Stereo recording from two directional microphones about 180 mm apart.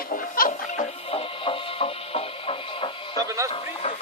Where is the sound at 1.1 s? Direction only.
30° left (ahead or behind).